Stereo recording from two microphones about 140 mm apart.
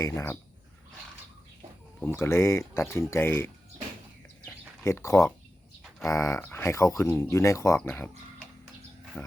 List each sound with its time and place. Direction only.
0.0 s speech: 20° left (ahead or behind)
2.0 s speech: 15° left (ahead or behind)
4.4 s a sound: 15° left (ahead or behind)
6.1 s speech: 20° left (ahead or behind)